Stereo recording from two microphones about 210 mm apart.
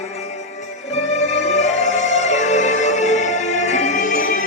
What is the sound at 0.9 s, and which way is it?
Music, 35° left (ahead or behind).